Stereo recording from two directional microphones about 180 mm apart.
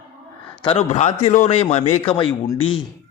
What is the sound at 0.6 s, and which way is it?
A man's voice, 35° left (ahead or behind).